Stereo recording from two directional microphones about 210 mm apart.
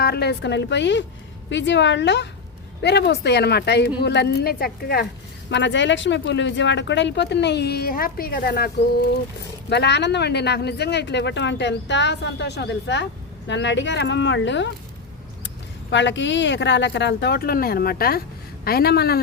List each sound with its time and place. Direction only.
0.0 s speech: 50° left (ahead or behind)
5.5 s speech: 60° left (ahead or behind)